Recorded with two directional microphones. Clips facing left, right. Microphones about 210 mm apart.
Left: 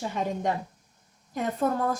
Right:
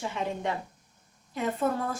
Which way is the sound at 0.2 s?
40° left (ahead or behind).